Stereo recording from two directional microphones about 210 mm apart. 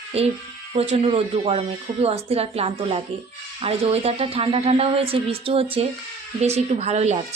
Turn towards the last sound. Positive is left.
turn(degrees=-30)  # may be behind; listen again after turning